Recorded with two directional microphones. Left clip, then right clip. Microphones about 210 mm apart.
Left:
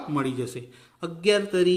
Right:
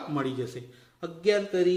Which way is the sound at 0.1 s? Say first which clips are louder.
Left 3 dB; 35° left (ahead or behind).